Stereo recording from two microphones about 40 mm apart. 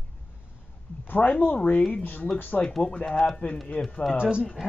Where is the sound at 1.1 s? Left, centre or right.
Left.